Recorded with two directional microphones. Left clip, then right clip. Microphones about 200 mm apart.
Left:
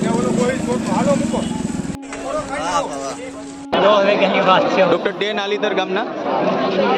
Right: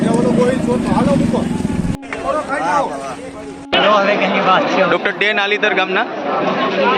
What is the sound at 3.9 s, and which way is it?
Speech, 45° left (ahead or behind).